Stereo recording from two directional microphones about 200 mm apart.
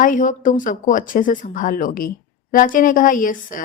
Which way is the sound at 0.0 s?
40° left (ahead or behind).